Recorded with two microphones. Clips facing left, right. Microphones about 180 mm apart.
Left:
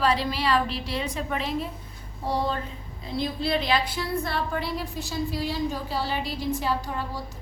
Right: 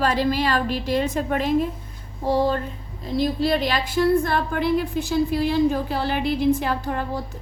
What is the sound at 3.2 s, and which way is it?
A woman's voice, 45° right (ahead or behind).